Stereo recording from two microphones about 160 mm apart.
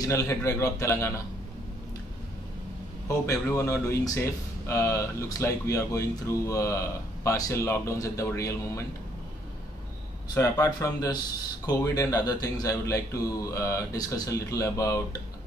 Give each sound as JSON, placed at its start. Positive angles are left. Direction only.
{"t": 0.0, "sound": "speech", "side_deg": 20}
{"t": 3.1, "sound": "speech", "side_deg": 20}
{"t": 10.3, "sound": "speech", "side_deg": 20}